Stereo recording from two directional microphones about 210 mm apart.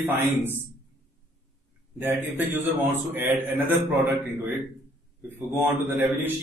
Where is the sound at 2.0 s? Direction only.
10° right (ahead or behind).